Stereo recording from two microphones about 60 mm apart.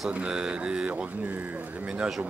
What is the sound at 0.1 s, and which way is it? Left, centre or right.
Speech, centre.